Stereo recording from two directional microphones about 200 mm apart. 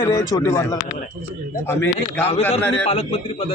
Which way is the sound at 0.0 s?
15° left (ahead or behind).